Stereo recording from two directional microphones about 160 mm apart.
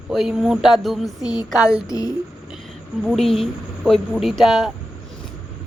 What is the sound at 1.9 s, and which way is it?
Speech, 20° left (ahead or behind).